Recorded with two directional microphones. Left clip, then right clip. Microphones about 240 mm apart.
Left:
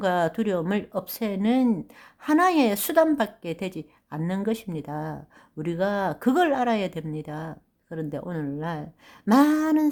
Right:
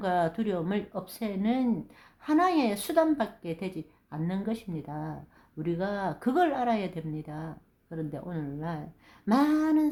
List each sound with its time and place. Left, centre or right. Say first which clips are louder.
0.0 s speech: left 4 dB; left